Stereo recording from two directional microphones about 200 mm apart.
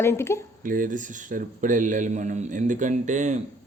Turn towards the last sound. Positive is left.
turn(degrees=-35)  # may be behind; listen again after turning